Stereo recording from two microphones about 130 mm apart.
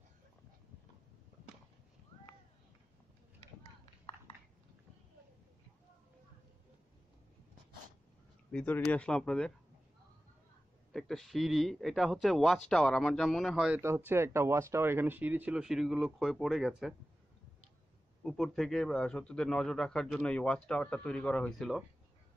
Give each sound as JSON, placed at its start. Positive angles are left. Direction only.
{"t": 8.5, "sound": "speech", "side_deg": 10}
{"t": 10.9, "sound": "a man's voice", "side_deg": 5}
{"t": 13.7, "sound": "speech", "side_deg": -20}
{"t": 18.2, "sound": "a man's voice", "side_deg": 0}